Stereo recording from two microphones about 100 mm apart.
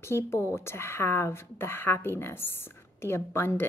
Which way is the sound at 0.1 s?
25° left (ahead or behind).